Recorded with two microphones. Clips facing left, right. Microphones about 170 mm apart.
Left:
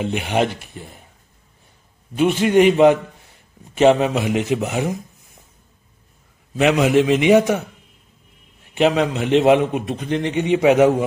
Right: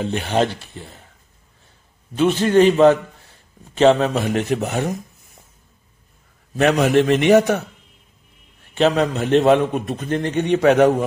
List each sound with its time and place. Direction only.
0.0 s speech: 15° left (ahead or behind)
2.1 s speech: 15° left (ahead or behind)
6.6 s speech: 15° left (ahead or behind)
8.7 s speech: 15° left (ahead or behind)